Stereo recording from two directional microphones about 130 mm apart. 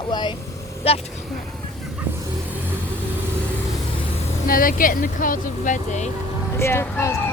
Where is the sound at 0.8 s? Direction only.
50° left (ahead or behind).